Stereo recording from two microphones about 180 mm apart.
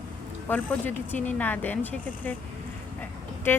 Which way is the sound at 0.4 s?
10° left (ahead or behind).